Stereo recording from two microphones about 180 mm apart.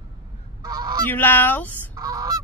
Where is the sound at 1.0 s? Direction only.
10° left (ahead or behind).